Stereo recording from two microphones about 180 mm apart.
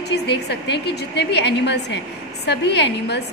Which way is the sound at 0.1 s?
65° left (ahead or behind).